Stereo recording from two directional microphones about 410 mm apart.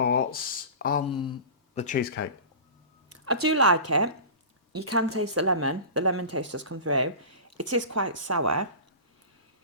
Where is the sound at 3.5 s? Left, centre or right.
Right.